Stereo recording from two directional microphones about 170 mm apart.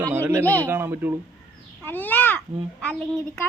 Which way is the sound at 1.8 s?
10° left (ahead or behind).